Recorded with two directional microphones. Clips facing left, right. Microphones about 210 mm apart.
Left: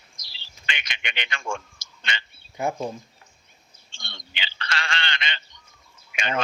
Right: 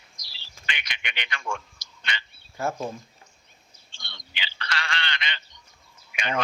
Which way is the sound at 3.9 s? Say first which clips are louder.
Left 2 dB; 25° left (ahead or behind).